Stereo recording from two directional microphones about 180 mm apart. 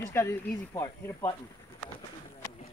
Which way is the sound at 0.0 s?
15° left (ahead or behind).